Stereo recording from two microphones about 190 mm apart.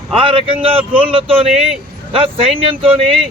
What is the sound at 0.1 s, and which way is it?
Speech, 25° right (ahead or behind).